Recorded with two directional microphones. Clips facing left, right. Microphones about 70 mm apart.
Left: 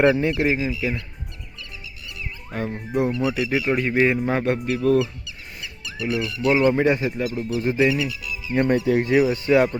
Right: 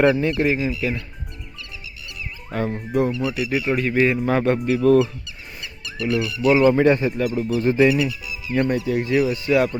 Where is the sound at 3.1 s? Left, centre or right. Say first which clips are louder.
Left 1 dB; left.